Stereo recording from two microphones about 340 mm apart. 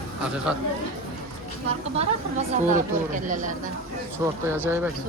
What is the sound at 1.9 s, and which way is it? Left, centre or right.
Speech, centre.